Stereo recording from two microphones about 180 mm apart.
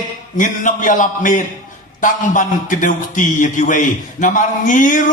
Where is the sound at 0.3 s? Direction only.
45° left (ahead or behind).